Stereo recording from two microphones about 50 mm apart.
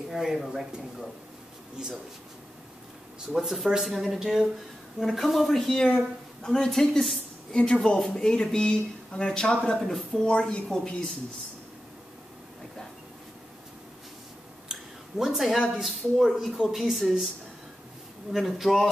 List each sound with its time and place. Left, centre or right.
0.1 s speech: centre
3.3 s speech: centre
5.8 s speech: centre
7.5 s speech: left
9.8 s speech: centre
10.2 s speech: left
14.7 s a sound: centre
15.7 s speech: centre
18.3 s speech: centre